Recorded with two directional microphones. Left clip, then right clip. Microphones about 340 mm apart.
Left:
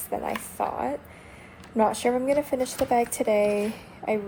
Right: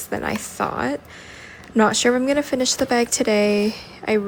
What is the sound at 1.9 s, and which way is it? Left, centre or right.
Speech, right.